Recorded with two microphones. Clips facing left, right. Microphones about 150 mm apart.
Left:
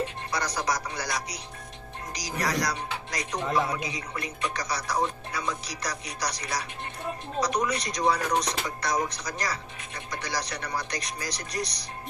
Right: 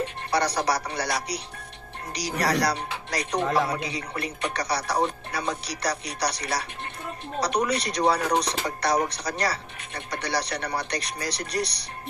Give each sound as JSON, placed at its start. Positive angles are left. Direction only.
{"t": 0.3, "sound": "speech", "side_deg": -65}